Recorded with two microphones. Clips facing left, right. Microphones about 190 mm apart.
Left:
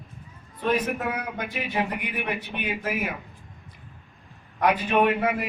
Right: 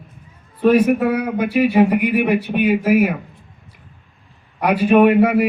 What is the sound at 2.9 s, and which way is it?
Speech, 60° right (ahead or behind).